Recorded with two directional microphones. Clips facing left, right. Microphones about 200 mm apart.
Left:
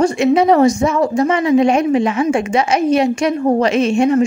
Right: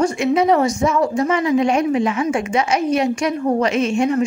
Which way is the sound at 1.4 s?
25° left (ahead or behind).